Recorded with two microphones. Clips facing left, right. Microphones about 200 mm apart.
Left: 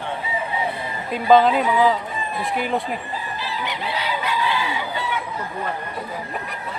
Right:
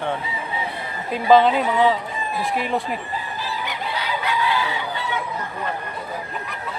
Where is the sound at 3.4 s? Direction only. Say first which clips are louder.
Left 1 dB; 45° right (ahead or behind).